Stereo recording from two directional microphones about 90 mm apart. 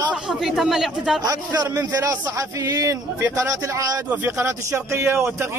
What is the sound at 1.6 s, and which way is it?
A man's voice, 40° right (ahead or behind).